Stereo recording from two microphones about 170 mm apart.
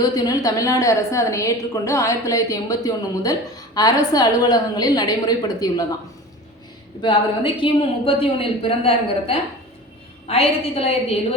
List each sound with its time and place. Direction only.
0.0 s a woman's voice: 20° left (ahead or behind)
7.0 s a woman's voice: 30° left (ahead or behind)